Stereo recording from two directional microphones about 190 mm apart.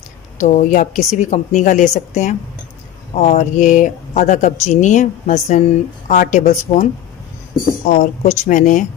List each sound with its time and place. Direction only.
0.3 s a woman's voice: 40° left (ahead or behind)
7.9 s speech: 40° left (ahead or behind)